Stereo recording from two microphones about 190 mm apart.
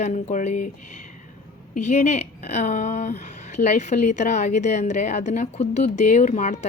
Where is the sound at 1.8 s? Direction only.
40° left (ahead or behind).